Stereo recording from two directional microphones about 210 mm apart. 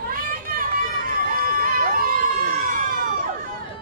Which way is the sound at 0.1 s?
40° right (ahead or behind).